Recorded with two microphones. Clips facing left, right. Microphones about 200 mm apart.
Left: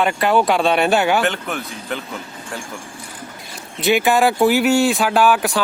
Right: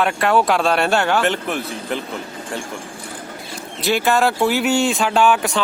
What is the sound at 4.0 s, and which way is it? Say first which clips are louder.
Speech: left 1 dB; centre (ahead or behind).